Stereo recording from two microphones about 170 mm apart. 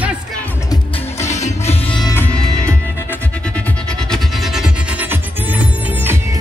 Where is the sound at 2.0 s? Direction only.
10° left (ahead or behind).